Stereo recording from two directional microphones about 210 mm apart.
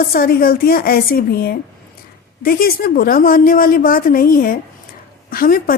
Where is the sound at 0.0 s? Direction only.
45° left (ahead or behind).